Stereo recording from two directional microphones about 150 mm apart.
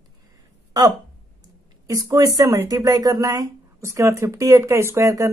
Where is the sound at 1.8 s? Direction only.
20° right (ahead or behind).